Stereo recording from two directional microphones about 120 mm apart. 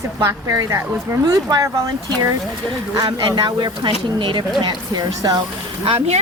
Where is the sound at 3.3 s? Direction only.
40° right (ahead or behind).